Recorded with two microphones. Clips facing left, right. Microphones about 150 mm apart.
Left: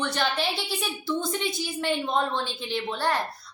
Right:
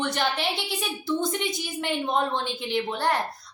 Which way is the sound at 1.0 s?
20° right (ahead or behind).